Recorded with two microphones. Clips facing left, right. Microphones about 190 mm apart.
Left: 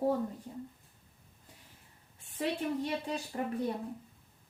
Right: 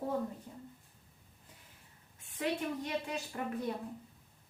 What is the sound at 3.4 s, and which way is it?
Speech, 35° left (ahead or behind).